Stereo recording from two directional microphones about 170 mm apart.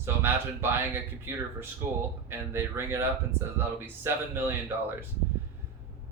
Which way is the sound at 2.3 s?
15° right (ahead or behind).